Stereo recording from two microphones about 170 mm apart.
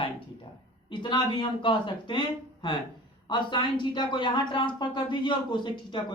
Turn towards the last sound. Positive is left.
turn(degrees=25)  # may be behind; listen again after turning